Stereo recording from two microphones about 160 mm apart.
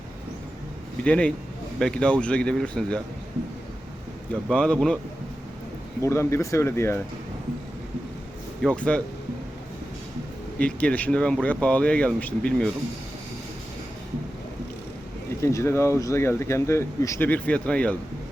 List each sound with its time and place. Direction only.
1.0 s speech: 5° left (ahead or behind)
4.4 s speech: 5° left (ahead or behind)
6.1 s speech: 15° left (ahead or behind)
8.6 s speech: 5° left (ahead or behind)
10.6 s speech: 5° left (ahead or behind)
15.4 s speech: 20° left (ahead or behind)